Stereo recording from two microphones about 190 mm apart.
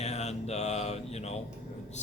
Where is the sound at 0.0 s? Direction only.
35° left (ahead or behind).